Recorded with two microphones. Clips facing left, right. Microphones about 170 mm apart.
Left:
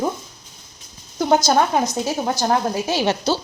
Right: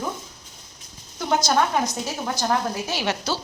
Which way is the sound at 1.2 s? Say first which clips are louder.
Left 5 dB; 35° left (ahead or behind).